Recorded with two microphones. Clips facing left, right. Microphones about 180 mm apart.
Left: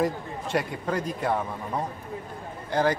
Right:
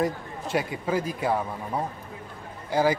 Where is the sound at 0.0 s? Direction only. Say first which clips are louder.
Left 1 dB; centre (ahead or behind).